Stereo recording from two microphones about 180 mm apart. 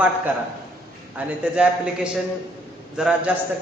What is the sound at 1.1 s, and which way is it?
A man's voice, 5° right (ahead or behind).